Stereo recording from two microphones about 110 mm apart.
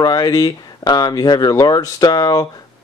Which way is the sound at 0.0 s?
35° left (ahead or behind).